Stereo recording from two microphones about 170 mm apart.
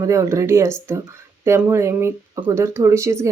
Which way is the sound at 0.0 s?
20° right (ahead or behind).